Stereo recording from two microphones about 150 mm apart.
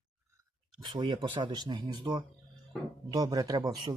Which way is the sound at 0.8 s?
30° right (ahead or behind).